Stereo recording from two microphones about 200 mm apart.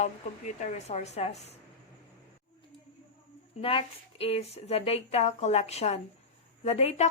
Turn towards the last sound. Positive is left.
turn(degrees=35)  # may be behind; listen again after turning